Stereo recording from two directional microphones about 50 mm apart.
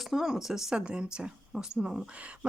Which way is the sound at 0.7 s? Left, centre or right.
Centre.